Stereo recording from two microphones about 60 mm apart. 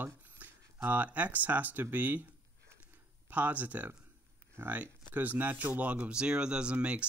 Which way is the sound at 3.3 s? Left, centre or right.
Right.